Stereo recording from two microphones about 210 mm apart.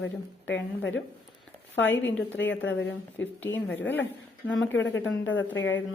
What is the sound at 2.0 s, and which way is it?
Speech, 60° left (ahead or behind).